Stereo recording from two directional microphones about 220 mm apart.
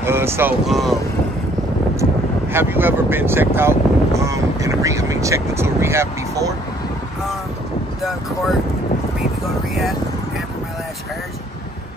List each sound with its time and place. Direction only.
0.0 s speech: 10° right (ahead or behind)
2.5 s speech: 10° right (ahead or behind)